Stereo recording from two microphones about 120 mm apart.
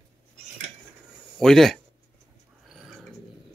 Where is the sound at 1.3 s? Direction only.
5° left (ahead or behind).